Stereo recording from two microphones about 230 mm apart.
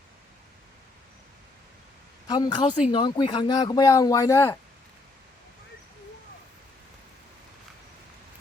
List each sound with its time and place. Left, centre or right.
2.2 s speech: centre